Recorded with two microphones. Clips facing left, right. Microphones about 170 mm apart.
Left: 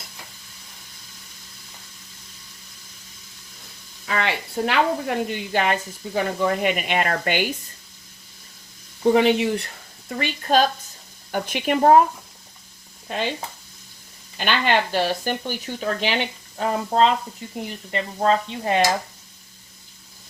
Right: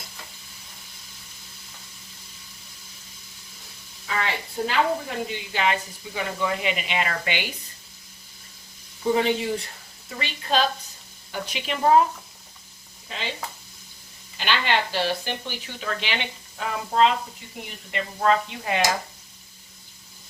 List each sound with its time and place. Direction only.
4.0 s a woman's voice: 70° left (ahead or behind); by 7.4 s 50° left (ahead or behind)
9.1 s speech: 70° left (ahead or behind)
10.2 s speech: 50° left (ahead or behind)
13.1 s speech: 50° left (ahead or behind)
14.3 s speech: 50° left (ahead or behind); by 18.7 s 30° left (ahead or behind)